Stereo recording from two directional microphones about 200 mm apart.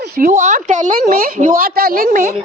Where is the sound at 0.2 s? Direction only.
35° right (ahead or behind).